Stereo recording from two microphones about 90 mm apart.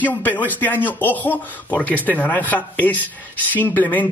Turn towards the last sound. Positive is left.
turn(degrees=20)  # may be behind; listen again after turning